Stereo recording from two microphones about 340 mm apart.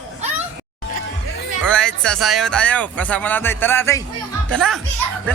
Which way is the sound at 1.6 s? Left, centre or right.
Centre.